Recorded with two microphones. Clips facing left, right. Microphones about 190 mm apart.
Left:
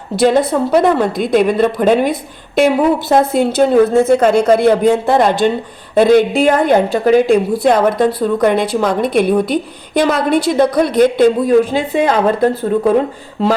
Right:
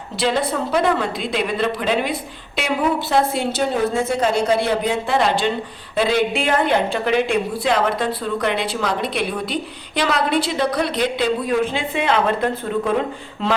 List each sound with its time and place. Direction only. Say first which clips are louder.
0.2 s a woman's voice: left 8 dB; 45° left (ahead or behind)